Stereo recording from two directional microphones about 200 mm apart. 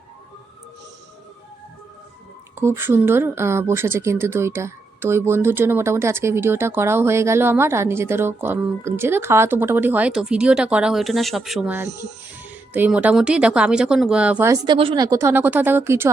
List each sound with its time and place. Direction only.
2.6 s speech: 10° right (ahead or behind)